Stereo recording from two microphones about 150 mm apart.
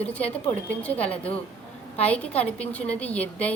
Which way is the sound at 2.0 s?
10° left (ahead or behind).